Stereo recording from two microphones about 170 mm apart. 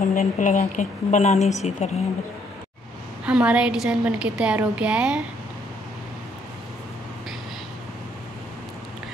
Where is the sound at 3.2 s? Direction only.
5° right (ahead or behind).